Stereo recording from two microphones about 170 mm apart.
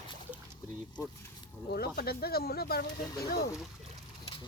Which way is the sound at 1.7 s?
65° left (ahead or behind).